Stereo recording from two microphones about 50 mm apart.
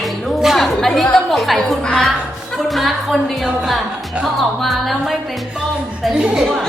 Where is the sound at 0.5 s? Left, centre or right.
Centre.